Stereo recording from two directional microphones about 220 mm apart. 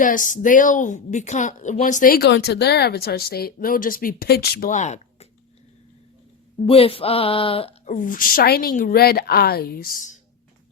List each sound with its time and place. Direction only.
0.0 s speech: 35° left (ahead or behind)
6.7 s speech: 25° left (ahead or behind)
7.9 s a woman's voice: 40° left (ahead or behind)